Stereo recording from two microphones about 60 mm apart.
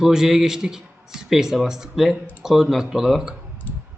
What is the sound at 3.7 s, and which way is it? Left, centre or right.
Clicking, left.